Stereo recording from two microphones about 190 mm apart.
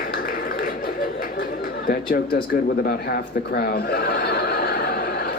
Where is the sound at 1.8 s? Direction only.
50° left (ahead or behind).